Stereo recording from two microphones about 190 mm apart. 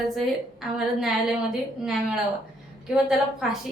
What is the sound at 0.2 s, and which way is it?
A woman's voice, centre (ahead or behind).